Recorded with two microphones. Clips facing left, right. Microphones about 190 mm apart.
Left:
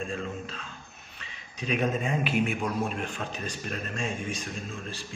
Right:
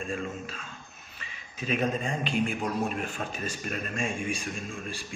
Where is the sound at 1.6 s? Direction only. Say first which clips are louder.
Left 1 dB; centre (ahead or behind).